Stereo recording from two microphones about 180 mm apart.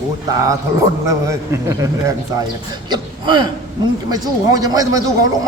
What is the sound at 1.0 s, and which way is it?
A man's voice, 15° right (ahead or behind).